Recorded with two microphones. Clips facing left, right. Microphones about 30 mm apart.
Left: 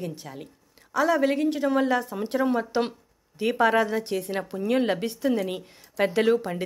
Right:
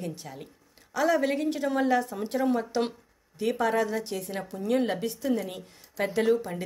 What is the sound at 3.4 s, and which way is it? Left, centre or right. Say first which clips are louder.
Speech: left 4 dB; left.